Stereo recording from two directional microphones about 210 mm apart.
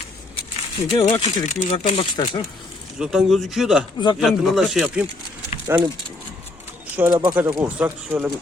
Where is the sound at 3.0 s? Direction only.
Centre (ahead or behind).